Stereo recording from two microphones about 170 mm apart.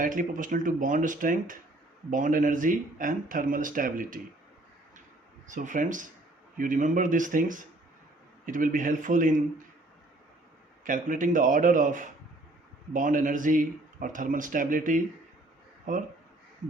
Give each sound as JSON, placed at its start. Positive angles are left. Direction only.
{"t": 0.0, "sound": "speech", "side_deg": -50}
{"t": 5.5, "sound": "speech", "side_deg": -50}
{"t": 10.8, "sound": "speech", "side_deg": -50}